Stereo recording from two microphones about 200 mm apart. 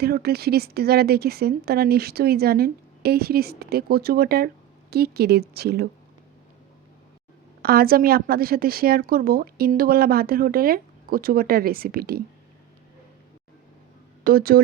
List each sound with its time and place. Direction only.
0.0 s speech: 50° right (ahead or behind)
7.6 s speech: 50° right (ahead or behind)
14.3 s speech: 50° right (ahead or behind)